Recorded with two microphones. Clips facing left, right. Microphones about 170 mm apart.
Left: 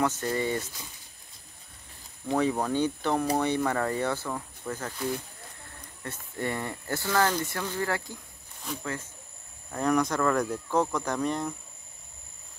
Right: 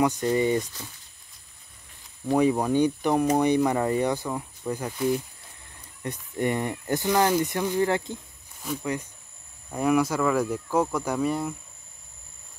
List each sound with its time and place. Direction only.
0.0 s speech: 15° right (ahead or behind)
2.2 s speech: 15° right (ahead or behind)
6.0 s speech: 20° right (ahead or behind)
9.7 s speech: 10° right (ahead or behind)